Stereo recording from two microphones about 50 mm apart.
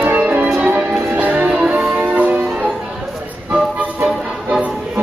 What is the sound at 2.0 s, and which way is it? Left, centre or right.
Music, right.